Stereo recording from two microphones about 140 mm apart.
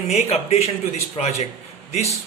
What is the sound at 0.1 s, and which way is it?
Speech, 50° left (ahead or behind).